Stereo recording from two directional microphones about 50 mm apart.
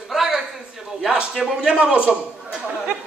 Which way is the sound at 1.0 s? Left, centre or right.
Centre.